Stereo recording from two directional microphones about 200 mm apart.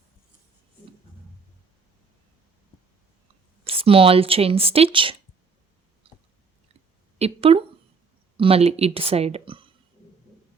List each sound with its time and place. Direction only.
3.6 s speech: 30° right (ahead or behind)
6.0 s chewing: 30° right (ahead or behind)
7.2 s speech: 30° right (ahead or behind)